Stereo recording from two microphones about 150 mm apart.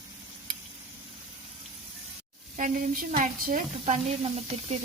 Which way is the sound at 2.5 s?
60° right (ahead or behind).